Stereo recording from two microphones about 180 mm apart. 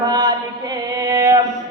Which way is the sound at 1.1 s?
20° right (ahead or behind).